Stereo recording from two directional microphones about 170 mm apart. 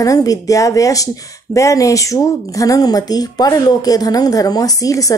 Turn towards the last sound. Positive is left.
turn(degrees=20)  # may be behind; listen again after turning